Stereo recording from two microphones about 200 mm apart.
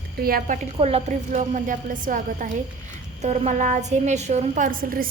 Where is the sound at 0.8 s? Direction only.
35° right (ahead or behind).